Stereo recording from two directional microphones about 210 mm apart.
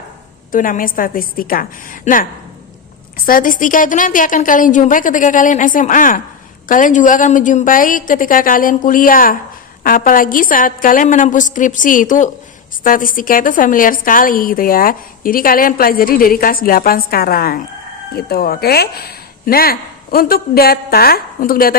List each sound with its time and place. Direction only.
0.5 s a woman's voice: 40° left (ahead or behind)
3.2 s a woman's voice: 40° left (ahead or behind)